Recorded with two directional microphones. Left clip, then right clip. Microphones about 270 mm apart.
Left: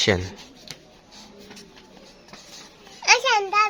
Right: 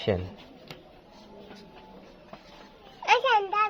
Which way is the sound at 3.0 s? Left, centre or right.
Centre.